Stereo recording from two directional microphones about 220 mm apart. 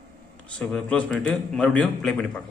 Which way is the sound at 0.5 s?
5° left (ahead or behind).